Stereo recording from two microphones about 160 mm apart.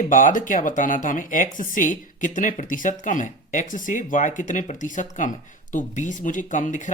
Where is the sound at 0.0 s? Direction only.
55° left (ahead or behind).